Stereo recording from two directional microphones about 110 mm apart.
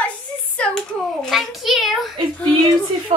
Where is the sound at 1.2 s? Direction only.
Centre (ahead or behind).